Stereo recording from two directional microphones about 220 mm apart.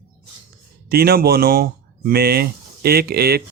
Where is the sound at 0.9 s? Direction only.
45° right (ahead or behind).